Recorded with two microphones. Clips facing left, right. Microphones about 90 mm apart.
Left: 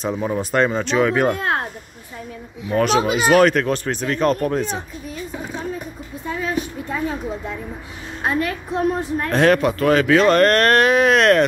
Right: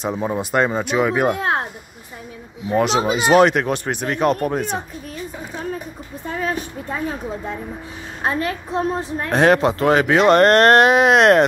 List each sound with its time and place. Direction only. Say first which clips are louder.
0.0 s speech: even; 15° right (ahead or behind)
2.7 s speech: even; 20° right (ahead or behind)
6.2 s a sound: even; 45° right (ahead or behind)
8.4 s a woman's voice: left 1 dB; 30° right (ahead or behind)